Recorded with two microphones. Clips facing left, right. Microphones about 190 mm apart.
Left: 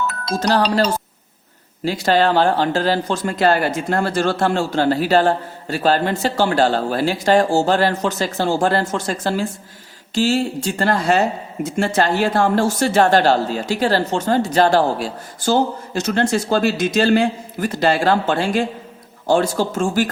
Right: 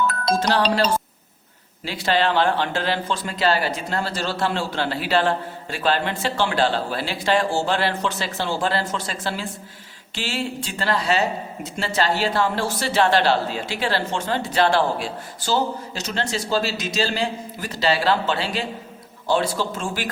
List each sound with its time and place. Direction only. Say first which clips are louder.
0.3 s speech: left 5 dB; 40° left (ahead or behind)